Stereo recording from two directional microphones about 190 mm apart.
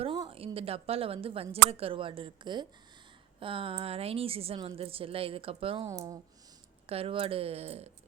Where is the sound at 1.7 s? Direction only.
30° right (ahead or behind).